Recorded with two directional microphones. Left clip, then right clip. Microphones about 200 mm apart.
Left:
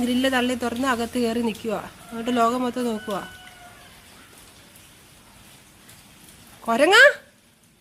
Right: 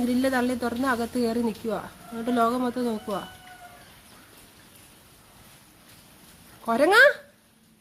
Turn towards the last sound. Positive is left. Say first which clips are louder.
# left 3 dB
turn(degrees=0)  # may be behind; listen again after turning